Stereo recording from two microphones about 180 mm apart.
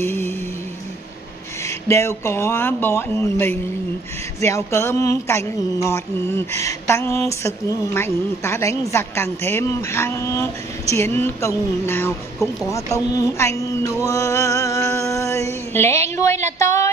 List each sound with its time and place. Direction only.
0.0 s music: 15° left (ahead or behind)
1.9 s speech: 15° left (ahead or behind)
13.6 s music: 15° left (ahead or behind)
15.7 s speech: 15° left (ahead or behind)